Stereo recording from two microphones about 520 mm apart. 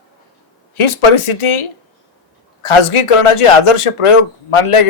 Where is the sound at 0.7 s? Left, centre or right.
Left.